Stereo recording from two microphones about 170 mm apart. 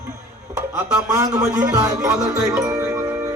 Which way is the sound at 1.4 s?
5° right (ahead or behind).